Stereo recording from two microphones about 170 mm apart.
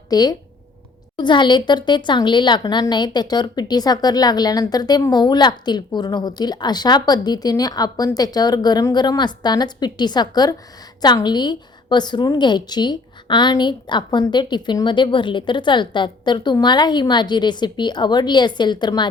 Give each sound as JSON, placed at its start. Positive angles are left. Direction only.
{"t": 0.1, "sound": "speech", "side_deg": 20}